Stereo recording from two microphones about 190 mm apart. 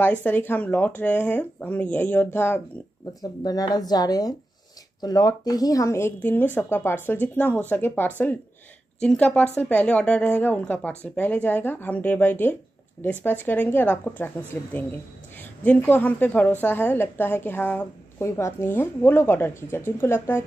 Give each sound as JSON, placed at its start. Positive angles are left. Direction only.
{"t": 0.0, "sound": "a woman's voice", "side_deg": 10}